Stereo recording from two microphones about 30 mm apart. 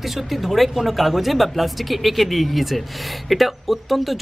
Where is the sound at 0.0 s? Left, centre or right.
Centre.